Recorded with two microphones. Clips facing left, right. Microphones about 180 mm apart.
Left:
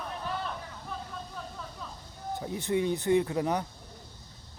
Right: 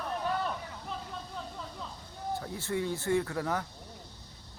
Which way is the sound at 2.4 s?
20° left (ahead or behind).